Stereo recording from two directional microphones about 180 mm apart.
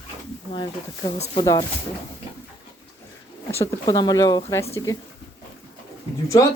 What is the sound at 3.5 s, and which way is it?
A woman's voice, 15° left (ahead or behind).